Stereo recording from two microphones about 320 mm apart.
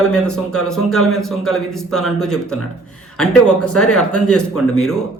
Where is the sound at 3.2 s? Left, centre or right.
Centre.